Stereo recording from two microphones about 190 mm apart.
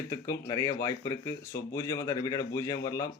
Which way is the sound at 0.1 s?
15° left (ahead or behind).